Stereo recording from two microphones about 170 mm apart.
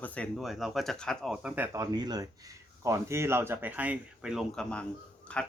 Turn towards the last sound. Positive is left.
turn(degrees=5)  # may be behind; listen again after turning